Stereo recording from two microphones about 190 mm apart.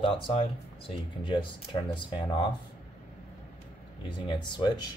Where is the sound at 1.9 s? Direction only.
25° left (ahead or behind).